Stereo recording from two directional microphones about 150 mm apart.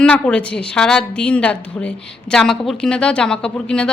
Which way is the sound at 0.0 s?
10° left (ahead or behind).